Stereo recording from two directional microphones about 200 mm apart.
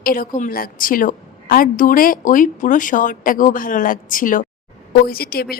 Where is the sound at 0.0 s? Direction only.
45° left (ahead or behind).